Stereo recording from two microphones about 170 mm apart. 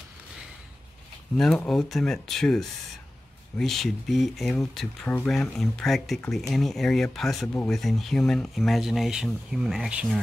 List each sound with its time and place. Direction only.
1.3 s speech: 5° left (ahead or behind)